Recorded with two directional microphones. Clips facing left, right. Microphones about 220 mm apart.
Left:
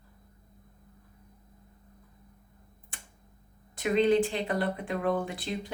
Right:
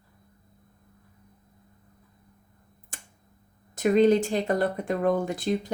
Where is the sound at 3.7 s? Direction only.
45° right (ahead or behind).